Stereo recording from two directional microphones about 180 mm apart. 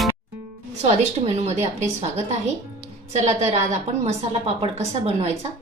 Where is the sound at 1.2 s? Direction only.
25° right (ahead or behind).